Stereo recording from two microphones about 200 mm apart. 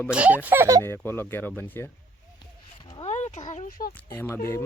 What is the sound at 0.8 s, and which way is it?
Speech, 10° left (ahead or behind).